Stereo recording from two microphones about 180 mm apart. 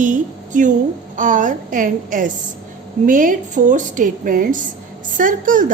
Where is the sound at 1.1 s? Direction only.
45° right (ahead or behind).